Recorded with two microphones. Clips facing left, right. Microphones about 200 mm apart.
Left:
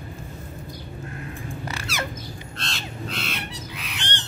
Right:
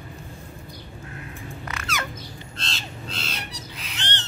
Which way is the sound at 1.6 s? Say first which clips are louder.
Right 1 dB; 30° left (ahead or behind).